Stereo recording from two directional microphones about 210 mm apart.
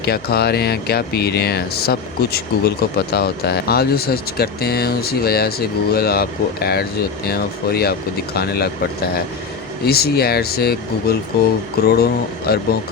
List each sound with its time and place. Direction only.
0.0 s speech: 50° left (ahead or behind)